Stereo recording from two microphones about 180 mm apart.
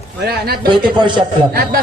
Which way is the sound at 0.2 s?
60° right (ahead or behind).